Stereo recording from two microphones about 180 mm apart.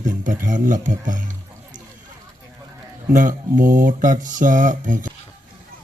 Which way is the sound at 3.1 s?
45° right (ahead or behind).